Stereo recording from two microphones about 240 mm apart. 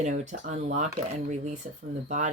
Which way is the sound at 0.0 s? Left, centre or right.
Right.